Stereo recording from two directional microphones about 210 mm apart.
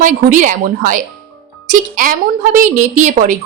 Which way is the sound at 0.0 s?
40° right (ahead or behind).